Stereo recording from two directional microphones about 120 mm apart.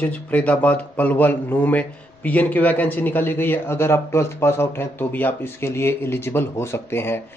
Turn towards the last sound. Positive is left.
turn(degrees=20)  # may be behind; listen again after turning